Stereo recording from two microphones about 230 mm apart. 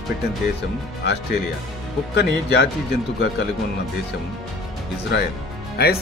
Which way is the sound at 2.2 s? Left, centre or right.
Left.